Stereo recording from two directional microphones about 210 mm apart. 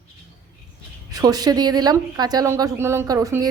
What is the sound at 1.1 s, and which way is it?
A woman's voice, 15° right (ahead or behind).